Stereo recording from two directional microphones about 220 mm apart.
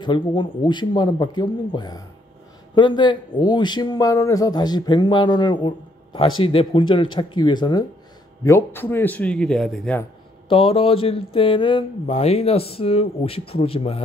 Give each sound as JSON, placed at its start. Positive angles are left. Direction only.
{"t": 0.0, "sound": "a man's voice", "side_deg": 20}
{"t": 10.5, "sound": "speech", "side_deg": 25}